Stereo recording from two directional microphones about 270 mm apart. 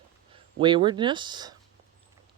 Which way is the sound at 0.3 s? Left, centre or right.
Centre.